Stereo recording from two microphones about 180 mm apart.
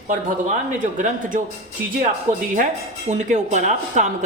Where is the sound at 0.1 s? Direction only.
45° right (ahead or behind).